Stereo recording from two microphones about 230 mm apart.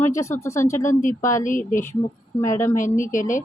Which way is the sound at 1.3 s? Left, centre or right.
Left.